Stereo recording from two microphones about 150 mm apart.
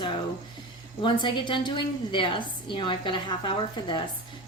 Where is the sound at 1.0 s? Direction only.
30° left (ahead or behind).